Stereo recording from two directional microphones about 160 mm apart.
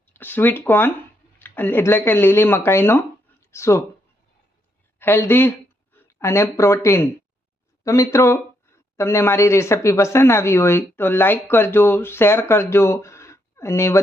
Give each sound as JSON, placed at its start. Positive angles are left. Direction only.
{"t": 0.1, "sound": "speech", "side_deg": 10}
{"t": 4.9, "sound": "speech", "side_deg": 15}